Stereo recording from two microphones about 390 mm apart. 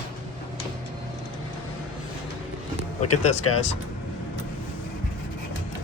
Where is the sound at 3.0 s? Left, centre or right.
Centre.